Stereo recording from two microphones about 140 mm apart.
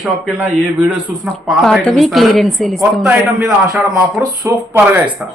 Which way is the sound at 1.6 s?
5° left (ahead or behind).